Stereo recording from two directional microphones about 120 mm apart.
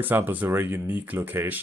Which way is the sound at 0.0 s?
15° right (ahead or behind).